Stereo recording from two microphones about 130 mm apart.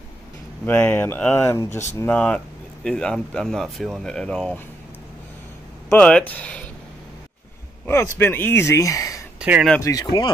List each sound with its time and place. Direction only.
0.7 s speech: 15° left (ahead or behind)
5.9 s speech: 10° left (ahead or behind)
7.8 s speech: 15° left (ahead or behind)
9.4 s speech: 10° right (ahead or behind)
9.8 s speech: 25° left (ahead or behind)